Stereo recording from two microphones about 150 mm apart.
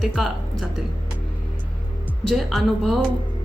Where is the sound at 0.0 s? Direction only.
Centre (ahead or behind).